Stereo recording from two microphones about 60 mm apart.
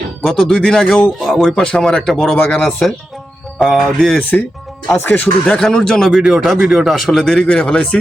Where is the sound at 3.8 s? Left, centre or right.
Centre.